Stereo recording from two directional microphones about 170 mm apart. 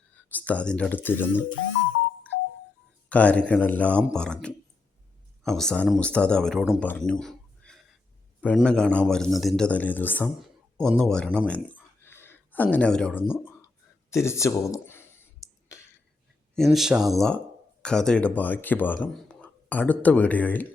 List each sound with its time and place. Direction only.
0.3 s speech: 10° left (ahead or behind)
3.1 s a man's voice: 10° left (ahead or behind)
14.1 s a sound: 15° left (ahead or behind)
16.6 s a man's voice: centre (ahead or behind)